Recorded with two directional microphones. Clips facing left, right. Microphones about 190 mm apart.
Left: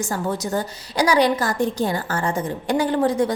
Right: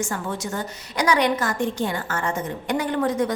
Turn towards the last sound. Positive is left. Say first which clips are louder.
# left 3 dB
turn(degrees=30)  # may be behind; listen again after turning